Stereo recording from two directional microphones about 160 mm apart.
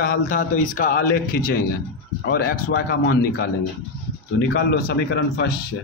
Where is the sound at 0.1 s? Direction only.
60° left (ahead or behind).